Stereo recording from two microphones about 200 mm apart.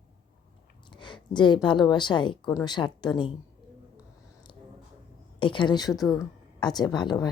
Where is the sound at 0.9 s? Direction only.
25° left (ahead or behind).